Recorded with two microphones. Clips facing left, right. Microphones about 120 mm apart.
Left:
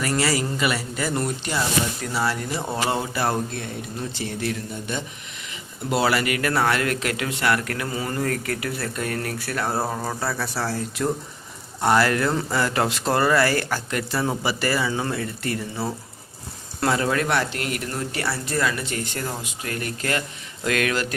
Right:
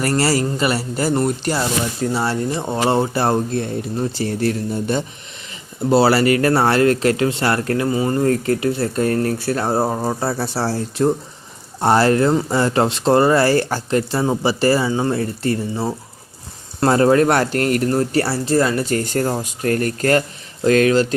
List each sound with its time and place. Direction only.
0.0 s speech: 35° right (ahead or behind)
16.8 s speech: 40° right (ahead or behind)
20.7 s speech: 30° right (ahead or behind)